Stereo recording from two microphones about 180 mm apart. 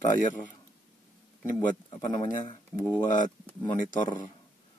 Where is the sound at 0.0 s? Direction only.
45° left (ahead or behind).